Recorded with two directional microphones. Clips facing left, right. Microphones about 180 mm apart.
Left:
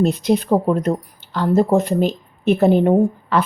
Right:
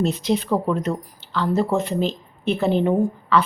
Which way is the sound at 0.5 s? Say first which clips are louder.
Left 5 dB; 45° left (ahead or behind).